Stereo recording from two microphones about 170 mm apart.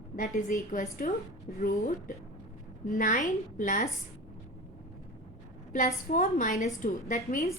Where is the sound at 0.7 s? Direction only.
55° left (ahead or behind).